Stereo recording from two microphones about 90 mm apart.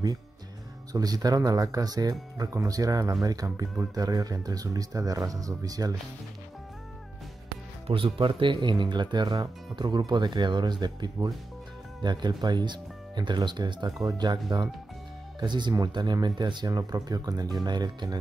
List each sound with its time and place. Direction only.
0.9 s speech: 45° right (ahead or behind)
7.8 s speech: 75° right (ahead or behind); by 18.2 s 50° right (ahead or behind)